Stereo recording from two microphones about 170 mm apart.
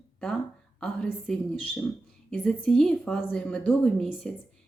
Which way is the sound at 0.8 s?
5° left (ahead or behind).